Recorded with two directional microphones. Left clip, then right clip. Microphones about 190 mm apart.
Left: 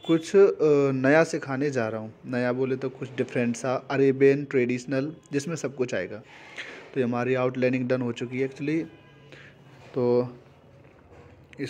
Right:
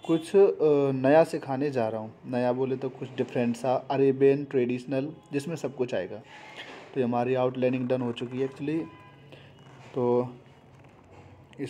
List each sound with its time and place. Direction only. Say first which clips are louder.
0.0 s speech: left 2 dB; 15° left (ahead or behind)
9.9 s speech: left 2 dB; 10° left (ahead or behind)